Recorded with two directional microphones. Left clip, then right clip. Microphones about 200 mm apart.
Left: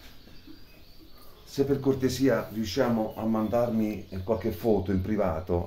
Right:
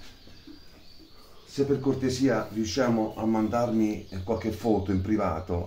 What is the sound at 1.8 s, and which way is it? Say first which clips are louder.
Speech: left 1 dB; 30° left (ahead or behind).